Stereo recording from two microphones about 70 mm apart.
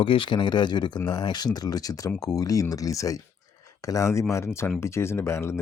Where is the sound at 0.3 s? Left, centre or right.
Left.